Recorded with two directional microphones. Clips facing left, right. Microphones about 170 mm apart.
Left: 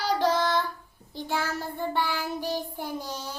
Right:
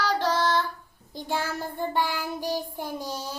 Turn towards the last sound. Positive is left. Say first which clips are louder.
# right 1 dB
turn(degrees=-10)  # may be behind; listen again after turning